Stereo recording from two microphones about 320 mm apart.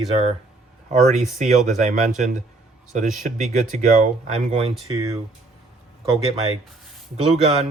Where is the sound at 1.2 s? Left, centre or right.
Right.